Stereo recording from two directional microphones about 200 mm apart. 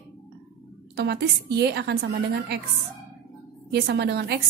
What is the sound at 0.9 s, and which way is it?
A woman's voice, 55° right (ahead or behind).